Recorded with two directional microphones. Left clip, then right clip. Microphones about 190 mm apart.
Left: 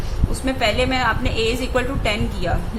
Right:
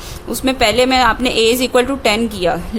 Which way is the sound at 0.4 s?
55° right (ahead or behind).